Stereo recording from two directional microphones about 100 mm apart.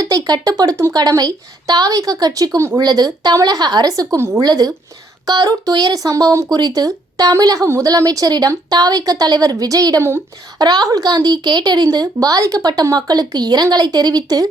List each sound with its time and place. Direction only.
0.0 s speech: 40° right (ahead or behind)